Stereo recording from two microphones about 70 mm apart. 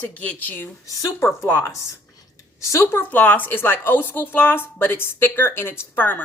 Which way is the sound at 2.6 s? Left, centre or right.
Left.